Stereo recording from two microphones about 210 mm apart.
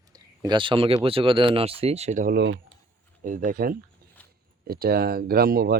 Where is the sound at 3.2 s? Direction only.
40° right (ahead or behind).